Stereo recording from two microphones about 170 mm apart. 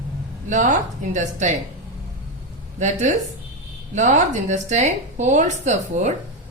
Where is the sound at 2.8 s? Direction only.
45° right (ahead or behind).